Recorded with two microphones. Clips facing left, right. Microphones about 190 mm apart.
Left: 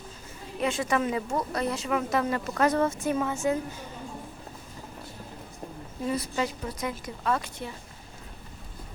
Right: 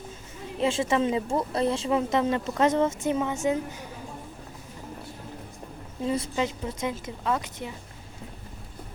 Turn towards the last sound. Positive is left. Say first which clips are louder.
# even
turn(degrees=-15)  # may be behind; listen again after turning